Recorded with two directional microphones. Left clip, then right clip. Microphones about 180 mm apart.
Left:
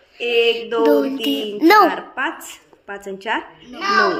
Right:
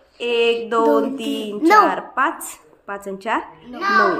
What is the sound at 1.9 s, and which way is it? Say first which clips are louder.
A woman's voice: right 3 dB; 30° right (ahead or behind).